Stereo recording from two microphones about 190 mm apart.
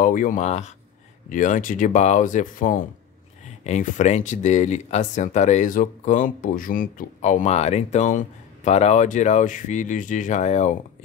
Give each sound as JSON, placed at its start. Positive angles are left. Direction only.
{"t": 0.0, "sound": "speech", "side_deg": 45}